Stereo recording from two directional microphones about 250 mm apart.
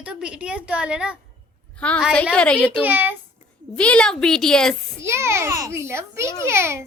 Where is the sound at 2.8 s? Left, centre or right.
Centre.